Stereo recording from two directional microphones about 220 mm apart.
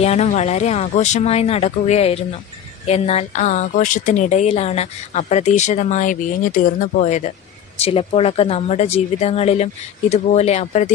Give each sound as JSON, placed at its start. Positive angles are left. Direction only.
{"t": 0.0, "sound": "a woman's voice", "side_deg": 30}